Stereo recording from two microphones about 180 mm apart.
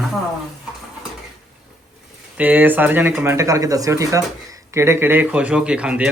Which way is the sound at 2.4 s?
10° right (ahead or behind).